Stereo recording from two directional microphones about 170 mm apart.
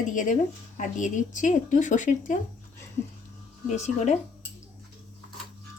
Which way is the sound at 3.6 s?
45° left (ahead or behind).